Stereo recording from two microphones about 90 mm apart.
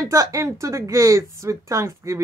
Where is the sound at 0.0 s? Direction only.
35° right (ahead or behind).